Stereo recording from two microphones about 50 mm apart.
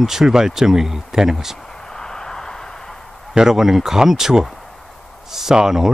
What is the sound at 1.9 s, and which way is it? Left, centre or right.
Vehicle, centre.